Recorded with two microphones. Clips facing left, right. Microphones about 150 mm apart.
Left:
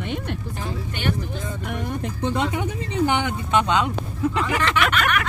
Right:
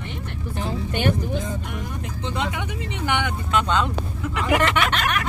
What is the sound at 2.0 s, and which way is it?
Speech, 50° left (ahead or behind).